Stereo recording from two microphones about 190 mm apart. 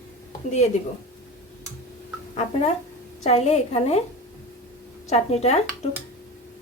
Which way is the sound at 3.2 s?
35° left (ahead or behind).